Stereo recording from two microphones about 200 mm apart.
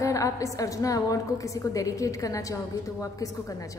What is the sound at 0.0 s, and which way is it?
A woman's voice, 15° left (ahead or behind).